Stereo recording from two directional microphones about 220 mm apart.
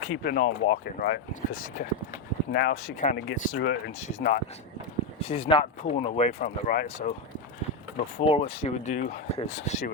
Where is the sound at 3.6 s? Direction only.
50° left (ahead or behind).